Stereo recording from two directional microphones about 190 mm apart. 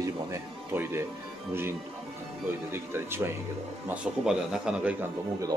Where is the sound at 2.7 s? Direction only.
10° right (ahead or behind).